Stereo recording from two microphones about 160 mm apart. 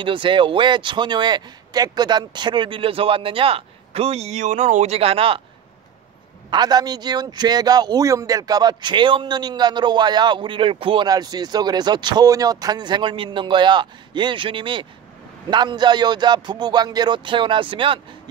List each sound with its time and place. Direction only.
0.0 s speech: 30° right (ahead or behind)
6.5 s speech: 25° right (ahead or behind)